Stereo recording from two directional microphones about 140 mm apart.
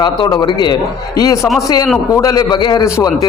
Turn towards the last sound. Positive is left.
turn(degrees=25)  # may be behind; listen again after turning